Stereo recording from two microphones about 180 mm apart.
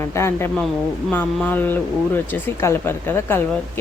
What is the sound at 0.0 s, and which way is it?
Speech, 15° left (ahead or behind).